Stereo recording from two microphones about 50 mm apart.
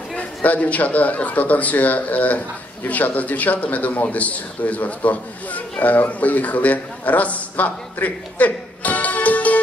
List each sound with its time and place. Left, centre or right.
0.4 s a man's voice: left